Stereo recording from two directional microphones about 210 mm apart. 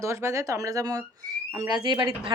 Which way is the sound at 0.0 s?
15° right (ahead or behind).